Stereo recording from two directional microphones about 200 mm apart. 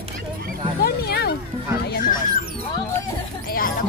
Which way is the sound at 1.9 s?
45° left (ahead or behind).